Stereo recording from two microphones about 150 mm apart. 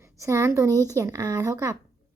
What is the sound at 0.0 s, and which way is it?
A woman's voice, 20° right (ahead or behind).